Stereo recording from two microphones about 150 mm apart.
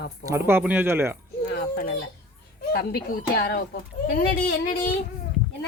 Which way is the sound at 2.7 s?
75° left (ahead or behind).